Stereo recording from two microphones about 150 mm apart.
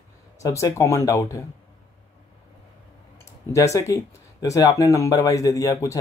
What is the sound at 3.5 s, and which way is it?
Speech, 20° left (ahead or behind).